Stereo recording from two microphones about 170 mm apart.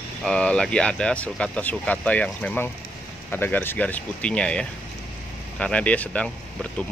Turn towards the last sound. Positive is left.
turn(degrees=5)  # may be behind; listen again after turning